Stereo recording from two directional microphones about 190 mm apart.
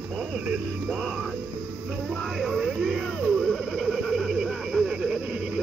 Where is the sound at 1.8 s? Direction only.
Centre (ahead or behind).